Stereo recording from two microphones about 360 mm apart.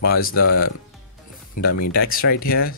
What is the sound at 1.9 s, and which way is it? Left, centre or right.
Speech, left.